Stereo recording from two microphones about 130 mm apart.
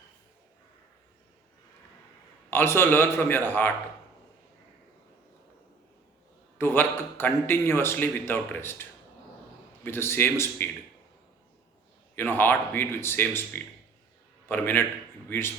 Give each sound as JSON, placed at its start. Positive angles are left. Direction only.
{"t": 2.5, "sound": "a man's voice", "side_deg": 15}
{"t": 6.6, "sound": "a man's voice", "side_deg": 15}
{"t": 12.1, "sound": "a man's voice", "side_deg": 15}